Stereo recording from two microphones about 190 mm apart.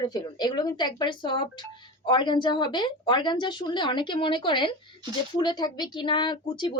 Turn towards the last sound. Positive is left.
turn(degrees=25)  # may be behind; listen again after turning